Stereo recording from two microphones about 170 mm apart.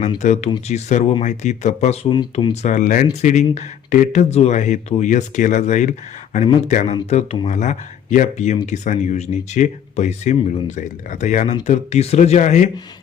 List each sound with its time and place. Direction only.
0.2 s speech: 45° left (ahead or behind)
2.0 s speech: 30° left (ahead or behind)
2.5 s speech: 45° left (ahead or behind)